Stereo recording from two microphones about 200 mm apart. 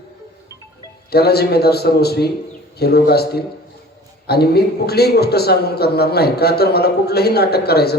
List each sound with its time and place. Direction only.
1.1 s a man's voice: 55° left (ahead or behind)